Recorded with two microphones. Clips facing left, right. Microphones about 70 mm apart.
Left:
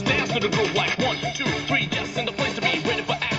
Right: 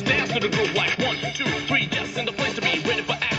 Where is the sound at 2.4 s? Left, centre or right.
Right.